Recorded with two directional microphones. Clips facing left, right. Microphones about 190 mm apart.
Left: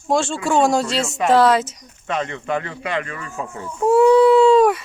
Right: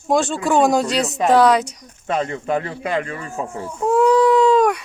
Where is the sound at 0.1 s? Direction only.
Centre (ahead or behind).